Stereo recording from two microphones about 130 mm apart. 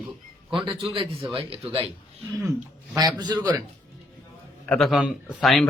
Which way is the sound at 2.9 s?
30° right (ahead or behind).